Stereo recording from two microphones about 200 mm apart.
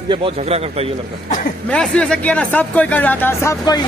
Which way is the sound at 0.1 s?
30° right (ahead or behind).